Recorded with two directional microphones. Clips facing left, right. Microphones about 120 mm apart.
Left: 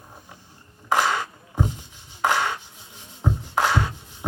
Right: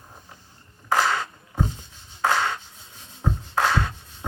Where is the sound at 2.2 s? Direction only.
15° left (ahead or behind).